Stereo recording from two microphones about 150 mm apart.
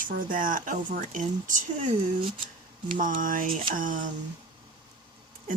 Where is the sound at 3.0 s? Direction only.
60° right (ahead or behind).